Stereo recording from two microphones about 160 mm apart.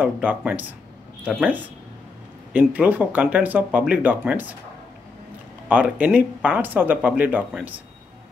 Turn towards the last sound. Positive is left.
turn(degrees=-10)  # may be behind; listen again after turning